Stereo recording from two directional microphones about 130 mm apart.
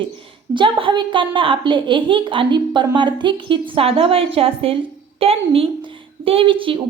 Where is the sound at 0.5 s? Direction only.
40° right (ahead or behind).